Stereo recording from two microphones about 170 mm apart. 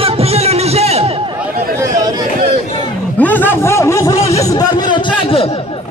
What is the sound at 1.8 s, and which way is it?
Chatter, 20° right (ahead or behind).